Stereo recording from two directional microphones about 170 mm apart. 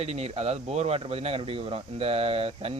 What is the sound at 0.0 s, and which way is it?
Speech, 35° right (ahead or behind).